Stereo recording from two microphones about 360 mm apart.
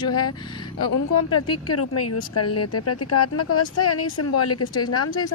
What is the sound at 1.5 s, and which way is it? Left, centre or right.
Speech, left.